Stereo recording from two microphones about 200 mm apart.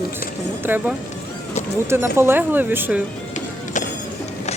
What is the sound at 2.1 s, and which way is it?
Speech, 10° right (ahead or behind).